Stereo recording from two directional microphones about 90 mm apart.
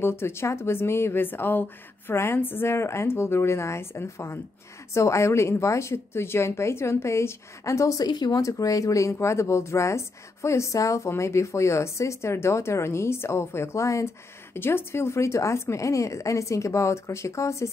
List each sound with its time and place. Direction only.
0.0 s speech: 25° left (ahead or behind)
8.1 s speech: 50° left (ahead or behind)
8.4 s speech: 40° left (ahead or behind)